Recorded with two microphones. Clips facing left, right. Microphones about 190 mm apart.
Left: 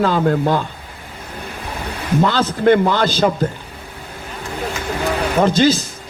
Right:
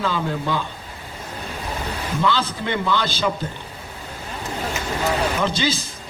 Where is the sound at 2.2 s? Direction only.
45° left (ahead or behind).